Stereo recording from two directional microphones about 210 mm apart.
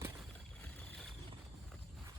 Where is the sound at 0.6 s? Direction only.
5° left (ahead or behind).